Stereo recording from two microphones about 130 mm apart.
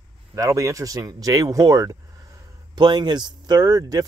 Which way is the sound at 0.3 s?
25° right (ahead or behind).